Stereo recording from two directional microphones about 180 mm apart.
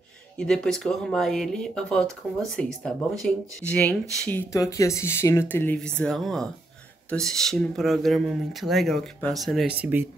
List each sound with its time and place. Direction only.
0.4 s speech: 5° left (ahead or behind)